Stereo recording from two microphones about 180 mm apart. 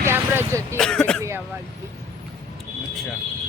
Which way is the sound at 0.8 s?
5° left (ahead or behind).